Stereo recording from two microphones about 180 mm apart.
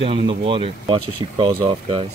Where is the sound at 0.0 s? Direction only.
30° right (ahead or behind).